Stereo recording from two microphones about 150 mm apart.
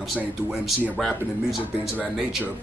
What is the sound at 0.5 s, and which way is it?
Speech, centre (ahead or behind).